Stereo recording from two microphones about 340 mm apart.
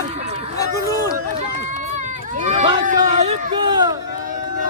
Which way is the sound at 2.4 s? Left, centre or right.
Right.